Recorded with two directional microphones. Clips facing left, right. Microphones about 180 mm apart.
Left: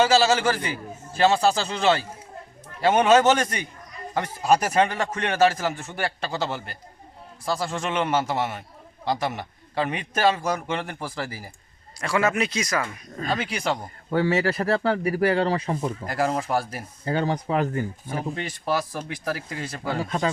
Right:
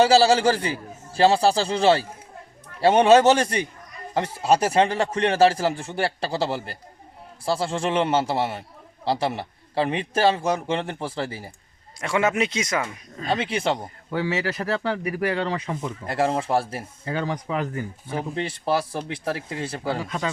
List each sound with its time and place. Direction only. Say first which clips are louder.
0.0 s a man's voice: right 3 dB; 30° right (ahead or behind)
14.1 s speech: left 4 dB; 45° left (ahead or behind)
16.0 s a man's voice: right 3 dB; 25° right (ahead or behind)
17.1 s speech: left 3 dB; 35° left (ahead or behind)
18.1 s a man's voice: right 6 dB; 25° right (ahead or behind)
20.0 s speech: left 3 dB; 40° left (ahead or behind)